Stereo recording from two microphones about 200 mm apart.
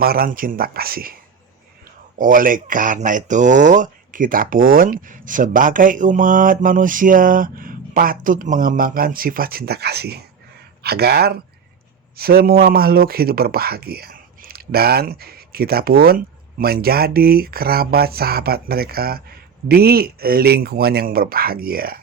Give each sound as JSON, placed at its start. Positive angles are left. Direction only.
{"t": 0.0, "sound": "a man's voice", "side_deg": -50}
{"t": 2.1, "sound": "a man's voice", "side_deg": -45}